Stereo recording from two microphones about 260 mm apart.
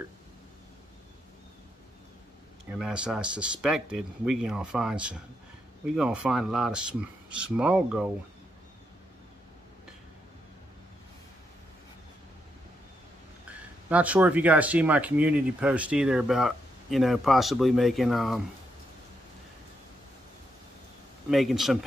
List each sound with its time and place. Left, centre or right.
2.8 s speech: centre
13.5 s speech: centre
21.3 s speech: centre